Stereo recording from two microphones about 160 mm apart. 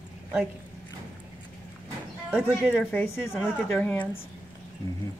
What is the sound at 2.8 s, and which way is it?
A woman's voice, 10° left (ahead or behind).